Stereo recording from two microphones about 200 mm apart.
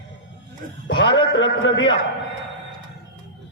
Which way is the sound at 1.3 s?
70° left (ahead or behind).